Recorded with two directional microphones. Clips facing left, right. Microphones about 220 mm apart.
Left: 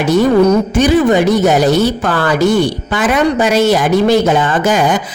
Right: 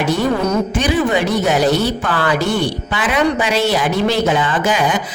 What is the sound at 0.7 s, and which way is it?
Speech, 45° left (ahead or behind).